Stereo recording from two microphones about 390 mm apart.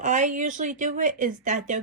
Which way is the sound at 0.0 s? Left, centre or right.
Centre.